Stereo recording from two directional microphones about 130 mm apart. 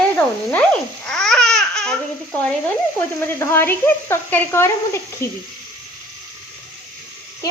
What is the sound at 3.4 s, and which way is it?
Speech, 20° left (ahead or behind).